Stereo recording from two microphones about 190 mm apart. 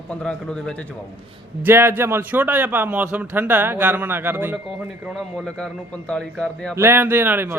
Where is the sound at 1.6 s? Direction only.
10° right (ahead or behind).